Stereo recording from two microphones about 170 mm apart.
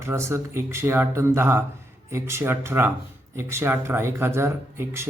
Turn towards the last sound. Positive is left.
turn(degrees=-15)  # may be behind; listen again after turning